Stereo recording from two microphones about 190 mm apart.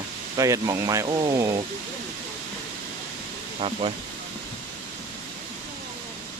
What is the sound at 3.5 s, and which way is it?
Speech, 30° right (ahead or behind).